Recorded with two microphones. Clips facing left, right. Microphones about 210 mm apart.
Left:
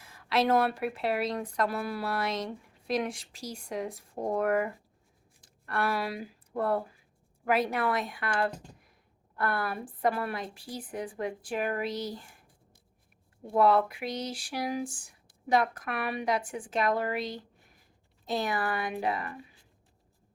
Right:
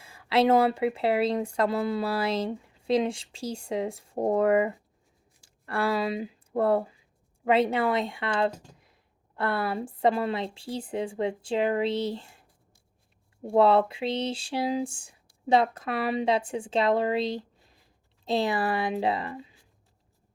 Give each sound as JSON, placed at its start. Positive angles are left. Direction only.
{"t": 0.0, "sound": "speech", "side_deg": -25}
{"t": 13.5, "sound": "speech", "side_deg": -25}